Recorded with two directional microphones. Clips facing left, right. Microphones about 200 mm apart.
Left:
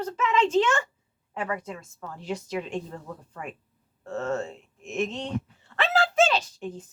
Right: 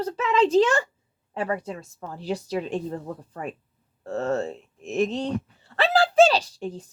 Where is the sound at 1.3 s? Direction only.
35° right (ahead or behind).